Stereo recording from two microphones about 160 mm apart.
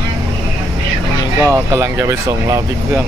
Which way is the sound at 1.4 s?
15° right (ahead or behind).